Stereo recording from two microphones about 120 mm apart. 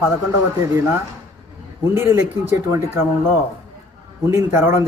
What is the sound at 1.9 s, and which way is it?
Speech, 20° right (ahead or behind).